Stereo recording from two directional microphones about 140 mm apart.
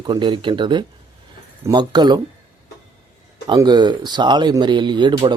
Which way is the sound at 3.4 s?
30° right (ahead or behind).